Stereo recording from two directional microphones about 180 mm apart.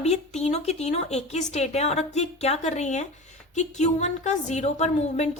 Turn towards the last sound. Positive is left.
turn(degrees=40)  # may be behind; listen again after turning